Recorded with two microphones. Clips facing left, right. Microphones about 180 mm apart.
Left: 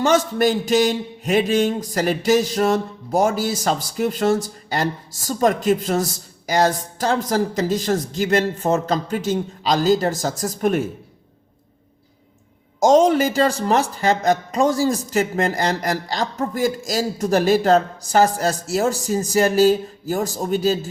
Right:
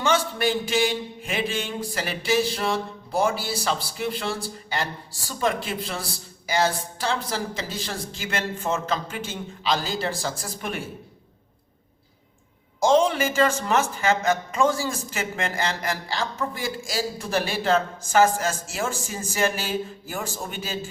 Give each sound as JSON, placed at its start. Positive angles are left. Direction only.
{"t": 0.0, "sound": "a man's voice", "side_deg": 40}
{"t": 12.8, "sound": "speech", "side_deg": 40}